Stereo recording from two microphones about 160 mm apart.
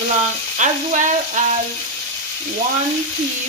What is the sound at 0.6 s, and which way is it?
Speech, 50° right (ahead or behind).